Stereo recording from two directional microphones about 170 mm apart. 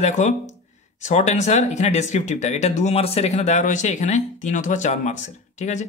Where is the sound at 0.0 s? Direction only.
45° left (ahead or behind).